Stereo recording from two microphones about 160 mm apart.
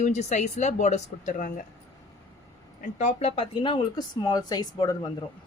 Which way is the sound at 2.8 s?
50° left (ahead or behind).